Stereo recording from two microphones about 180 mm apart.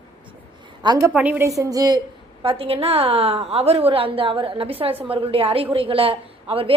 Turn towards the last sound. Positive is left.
turn(degrees=-30)  # may be behind; listen again after turning